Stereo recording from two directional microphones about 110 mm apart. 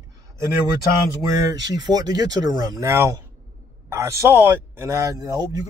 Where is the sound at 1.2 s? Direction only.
30° right (ahead or behind).